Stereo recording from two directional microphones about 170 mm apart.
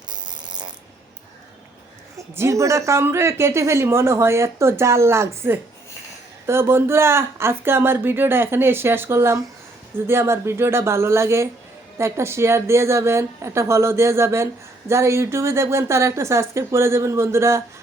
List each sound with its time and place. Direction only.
0.1 s fart: 25° right (ahead or behind)
2.3 s speech: 15° right (ahead or behind)